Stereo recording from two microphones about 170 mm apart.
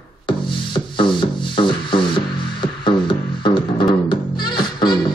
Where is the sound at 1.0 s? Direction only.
30° left (ahead or behind).